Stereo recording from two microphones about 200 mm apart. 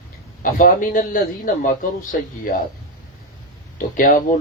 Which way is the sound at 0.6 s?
45° left (ahead or behind).